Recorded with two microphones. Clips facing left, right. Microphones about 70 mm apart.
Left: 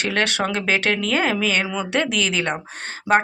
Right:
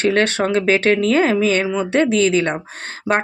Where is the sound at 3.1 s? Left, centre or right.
Right.